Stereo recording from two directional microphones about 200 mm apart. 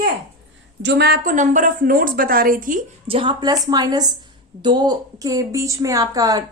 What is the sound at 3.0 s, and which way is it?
A woman's voice, 25° right (ahead or behind).